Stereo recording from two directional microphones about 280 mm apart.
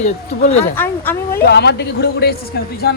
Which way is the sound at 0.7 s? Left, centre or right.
Centre.